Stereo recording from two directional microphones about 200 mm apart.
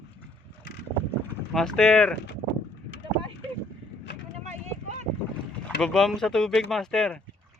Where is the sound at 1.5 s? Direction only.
Centre (ahead or behind).